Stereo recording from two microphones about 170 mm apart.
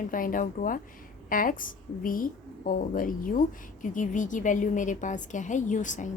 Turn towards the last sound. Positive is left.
turn(degrees=45)  # may be behind; listen again after turning